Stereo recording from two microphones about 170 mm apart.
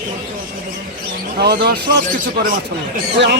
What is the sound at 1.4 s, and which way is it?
Speech, 70° right (ahead or behind).